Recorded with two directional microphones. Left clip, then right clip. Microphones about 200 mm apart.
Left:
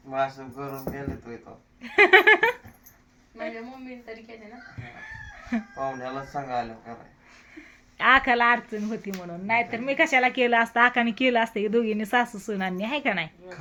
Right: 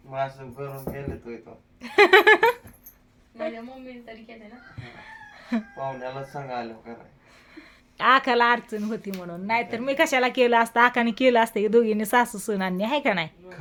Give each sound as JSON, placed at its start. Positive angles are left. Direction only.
{"t": 1.8, "sound": "a sound", "side_deg": -20}
{"t": 5.5, "sound": "speech", "side_deg": -15}
{"t": 6.0, "sound": "speech", "side_deg": 10}
{"t": 7.5, "sound": "speech", "side_deg": -20}